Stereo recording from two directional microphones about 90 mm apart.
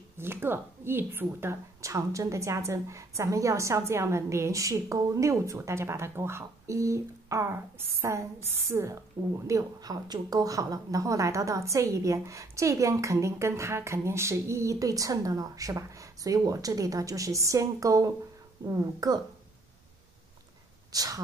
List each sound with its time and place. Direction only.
0.2 s a woman's voice: 25° right (ahead or behind); by 19.2 s 40° right (ahead or behind)
20.9 s speech: 45° right (ahead or behind)